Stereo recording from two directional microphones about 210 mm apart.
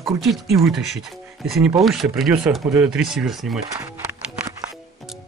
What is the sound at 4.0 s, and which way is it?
Music, 10° right (ahead or behind).